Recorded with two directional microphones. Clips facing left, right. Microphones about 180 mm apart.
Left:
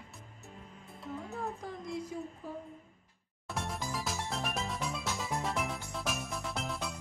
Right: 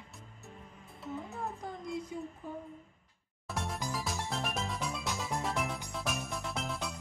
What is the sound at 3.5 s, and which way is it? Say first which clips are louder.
Music: even; centre (ahead or behind).